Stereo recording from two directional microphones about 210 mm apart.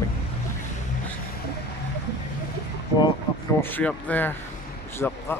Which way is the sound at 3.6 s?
10° left (ahead or behind).